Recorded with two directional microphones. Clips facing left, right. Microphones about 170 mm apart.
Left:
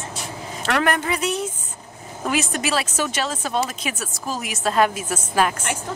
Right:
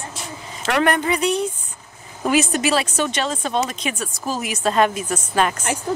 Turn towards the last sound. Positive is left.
turn(degrees=5)  # may be behind; listen again after turning